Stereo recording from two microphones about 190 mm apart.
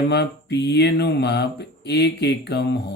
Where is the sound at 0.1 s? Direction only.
60° left (ahead or behind).